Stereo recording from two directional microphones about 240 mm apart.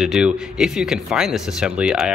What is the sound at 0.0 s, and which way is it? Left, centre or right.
A man's voice, centre.